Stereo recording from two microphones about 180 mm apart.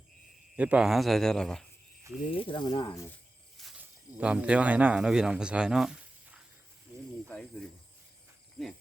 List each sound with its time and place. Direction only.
0.5 s speech: 5° right (ahead or behind)
2.3 s speech: 30° left (ahead or behind)
3.6 s cricket: centre (ahead or behind)
4.2 s speech: 5° right (ahead or behind)
8.6 s speech: centre (ahead or behind)